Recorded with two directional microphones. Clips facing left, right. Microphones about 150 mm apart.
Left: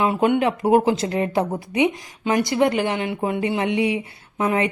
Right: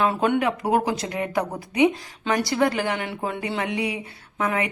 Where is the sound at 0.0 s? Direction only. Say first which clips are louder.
Left 3 dB; 20° left (ahead or behind).